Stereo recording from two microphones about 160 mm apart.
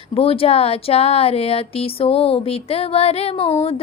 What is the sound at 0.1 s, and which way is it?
Speech, 35° left (ahead or behind).